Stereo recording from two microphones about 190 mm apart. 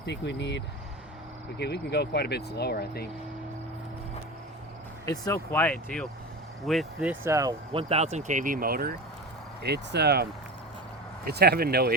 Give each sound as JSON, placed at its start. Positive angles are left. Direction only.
{"t": 0.0, "sound": "speech", "side_deg": 65}
{"t": 5.0, "sound": "speech", "side_deg": 20}
{"t": 7.7, "sound": "speech", "side_deg": -30}
{"t": 11.3, "sound": "speech", "side_deg": -55}